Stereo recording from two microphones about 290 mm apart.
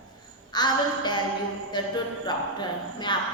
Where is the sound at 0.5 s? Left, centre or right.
Centre.